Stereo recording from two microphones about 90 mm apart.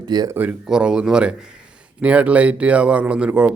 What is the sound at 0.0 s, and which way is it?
Speech, 50° right (ahead or behind).